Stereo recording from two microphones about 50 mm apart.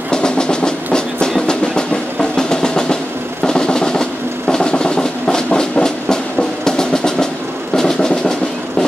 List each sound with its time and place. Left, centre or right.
0.1 s train: centre
1.5 s drum: centre